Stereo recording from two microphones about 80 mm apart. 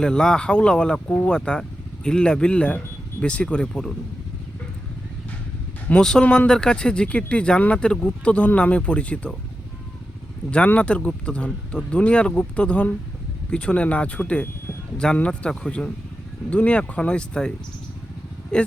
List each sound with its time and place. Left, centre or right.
0.0 s speech: centre
5.9 s speech: centre
10.5 s speech: centre